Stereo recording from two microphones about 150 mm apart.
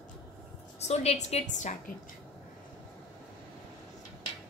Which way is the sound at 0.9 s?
45° left (ahead or behind).